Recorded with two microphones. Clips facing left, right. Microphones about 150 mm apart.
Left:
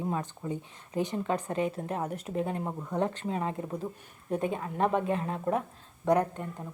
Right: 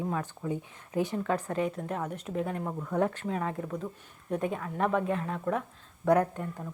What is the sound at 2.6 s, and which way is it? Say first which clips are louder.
Speech: right 2 dB; 15° left (ahead or behind).